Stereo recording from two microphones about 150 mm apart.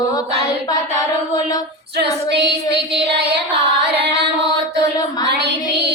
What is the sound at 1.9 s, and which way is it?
Female singing, 90° right.